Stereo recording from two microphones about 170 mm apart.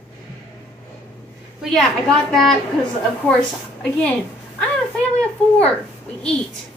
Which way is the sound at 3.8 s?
5° left (ahead or behind).